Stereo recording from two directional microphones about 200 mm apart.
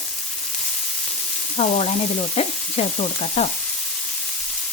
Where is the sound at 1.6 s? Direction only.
35° left (ahead or behind).